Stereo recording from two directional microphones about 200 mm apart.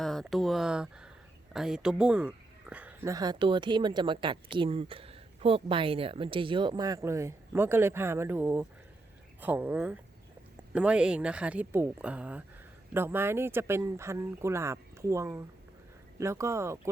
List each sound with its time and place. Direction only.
0.0 s speech: centre (ahead or behind)